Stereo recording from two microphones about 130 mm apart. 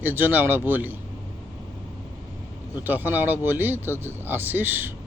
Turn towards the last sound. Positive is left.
turn(degrees=-15)  # may be behind; listen again after turning